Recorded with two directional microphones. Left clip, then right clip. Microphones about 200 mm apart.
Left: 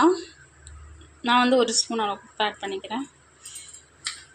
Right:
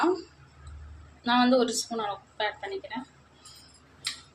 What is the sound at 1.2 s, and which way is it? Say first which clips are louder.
A woman's voice: left 4 dB; 20° left (ahead or behind).